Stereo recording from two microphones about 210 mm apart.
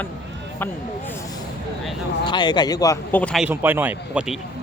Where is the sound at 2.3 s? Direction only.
20° left (ahead or behind); by 4.4 s 5° right (ahead or behind).